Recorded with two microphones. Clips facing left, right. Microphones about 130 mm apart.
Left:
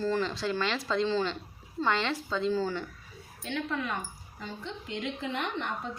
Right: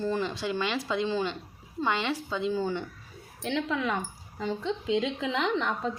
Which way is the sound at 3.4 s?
90° right.